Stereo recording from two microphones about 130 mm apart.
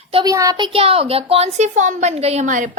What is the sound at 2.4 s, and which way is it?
Speech, 80° right.